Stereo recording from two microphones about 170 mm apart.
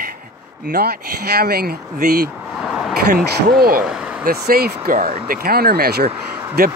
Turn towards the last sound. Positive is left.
turn(degrees=-65)  # may be behind; listen again after turning